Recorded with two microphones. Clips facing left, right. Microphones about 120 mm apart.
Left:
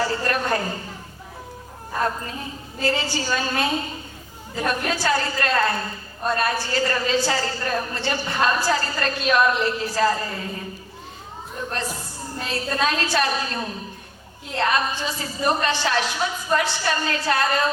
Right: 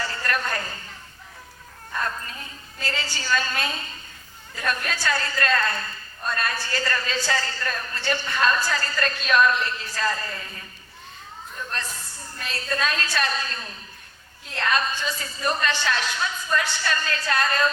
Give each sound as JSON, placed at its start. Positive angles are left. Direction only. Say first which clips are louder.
{"t": 0.0, "sound": "a woman's voice", "louder": "left 5 dB", "side_deg": 20}
{"t": 2.0, "sound": "a woman's voice", "louder": "left 5 dB", "side_deg": 20}
{"t": 11.7, "sound": "a woman's voice", "louder": "left 5 dB", "side_deg": 20}